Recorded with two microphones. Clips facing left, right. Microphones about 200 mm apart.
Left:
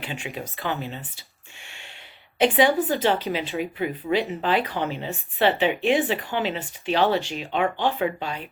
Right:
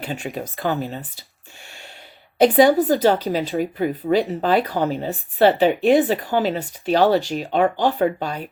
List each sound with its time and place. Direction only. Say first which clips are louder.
0.0 s speech: right 5 dB; 40° right (ahead or behind)
1.6 s a sound: right 5 dB; 40° right (ahead or behind)
2.4 s speech: right 6 dB; 40° right (ahead or behind)